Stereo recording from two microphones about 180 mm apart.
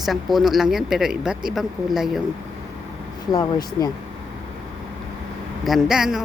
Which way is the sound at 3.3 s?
20° left (ahead or behind).